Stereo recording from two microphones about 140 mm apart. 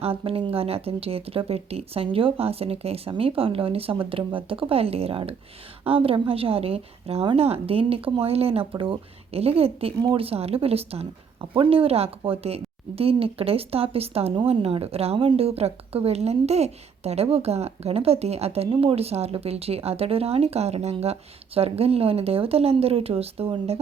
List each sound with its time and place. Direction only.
0.0 s a woman's voice: 40° right (ahead or behind)